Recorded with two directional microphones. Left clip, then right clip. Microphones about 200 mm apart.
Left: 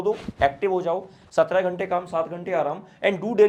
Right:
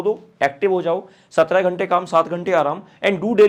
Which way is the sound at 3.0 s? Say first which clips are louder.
Right 4 dB; 25° right (ahead or behind).